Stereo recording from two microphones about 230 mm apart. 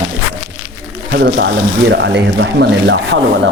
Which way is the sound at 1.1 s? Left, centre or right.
Right.